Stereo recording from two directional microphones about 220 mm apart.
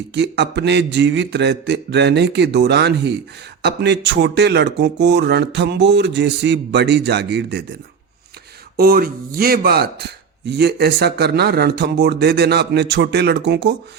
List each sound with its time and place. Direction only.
0.1 s speech: 50° right (ahead or behind)